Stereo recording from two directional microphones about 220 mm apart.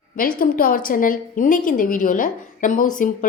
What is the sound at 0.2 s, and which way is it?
A woman's voice, 40° left (ahead or behind).